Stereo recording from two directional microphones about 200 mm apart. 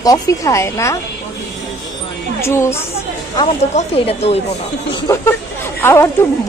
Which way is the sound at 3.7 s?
30° left (ahead or behind).